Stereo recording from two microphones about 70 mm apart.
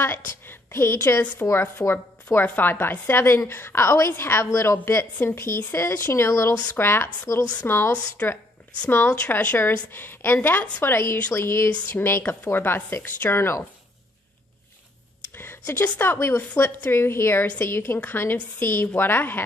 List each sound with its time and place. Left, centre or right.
0.0 s a sound: left
1.4 s a woman's voice: left
2.3 s a woman's voice: left
7.9 s a woman's voice: left
15.3 s a woman's voice: left